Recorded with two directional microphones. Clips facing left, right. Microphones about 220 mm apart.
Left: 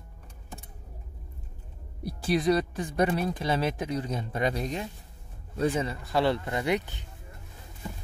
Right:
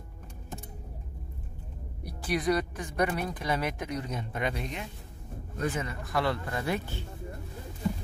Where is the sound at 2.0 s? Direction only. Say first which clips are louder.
Left 4 dB; 25° left (ahead or behind).